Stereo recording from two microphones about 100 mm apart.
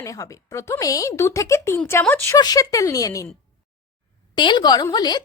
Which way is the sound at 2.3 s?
40° left (ahead or behind).